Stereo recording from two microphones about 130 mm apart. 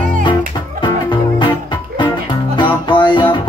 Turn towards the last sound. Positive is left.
turn(degrees=35)  # may be behind; listen again after turning